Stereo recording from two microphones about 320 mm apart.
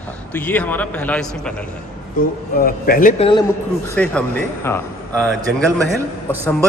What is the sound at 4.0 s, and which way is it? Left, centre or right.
A man's voice, centre.